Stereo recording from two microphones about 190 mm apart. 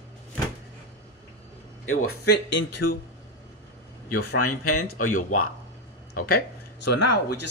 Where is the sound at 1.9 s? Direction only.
60° left (ahead or behind).